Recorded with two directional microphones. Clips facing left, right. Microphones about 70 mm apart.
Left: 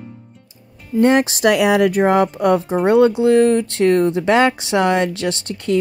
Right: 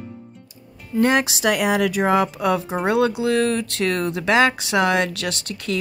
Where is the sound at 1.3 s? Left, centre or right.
Left.